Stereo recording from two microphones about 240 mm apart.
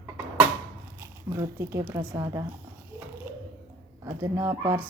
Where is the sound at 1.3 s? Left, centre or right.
Centre.